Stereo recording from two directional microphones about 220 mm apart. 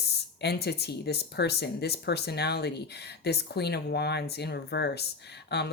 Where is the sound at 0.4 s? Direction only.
50° left (ahead or behind).